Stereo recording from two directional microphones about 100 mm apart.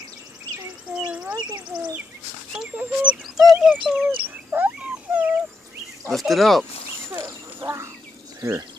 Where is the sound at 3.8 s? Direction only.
15° right (ahead or behind).